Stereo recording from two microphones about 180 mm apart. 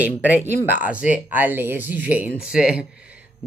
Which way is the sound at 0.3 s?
10° right (ahead or behind).